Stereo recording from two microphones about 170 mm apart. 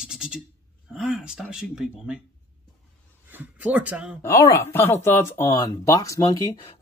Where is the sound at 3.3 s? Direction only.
10° right (ahead or behind).